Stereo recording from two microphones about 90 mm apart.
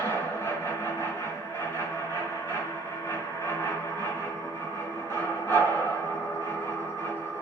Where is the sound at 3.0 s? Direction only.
30° left (ahead or behind).